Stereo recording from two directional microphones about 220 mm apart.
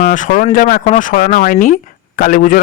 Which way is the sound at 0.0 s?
40° left (ahead or behind).